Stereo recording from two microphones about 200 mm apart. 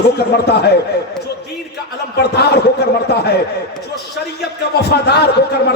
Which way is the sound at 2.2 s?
55° left (ahead or behind).